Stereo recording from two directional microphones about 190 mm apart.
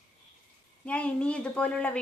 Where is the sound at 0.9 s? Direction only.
5° left (ahead or behind).